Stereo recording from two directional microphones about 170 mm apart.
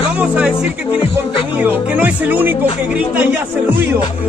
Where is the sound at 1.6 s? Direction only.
10° right (ahead or behind).